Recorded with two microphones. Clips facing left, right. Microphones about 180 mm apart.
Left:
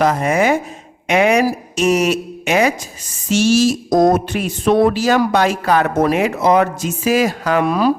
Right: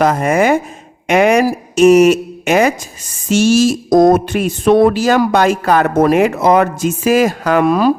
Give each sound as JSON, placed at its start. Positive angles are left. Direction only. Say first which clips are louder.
{"t": 0.0, "sound": "speech", "louder": "right 3 dB", "side_deg": -50}